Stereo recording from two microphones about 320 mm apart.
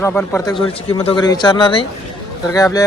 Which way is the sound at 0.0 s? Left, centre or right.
Centre.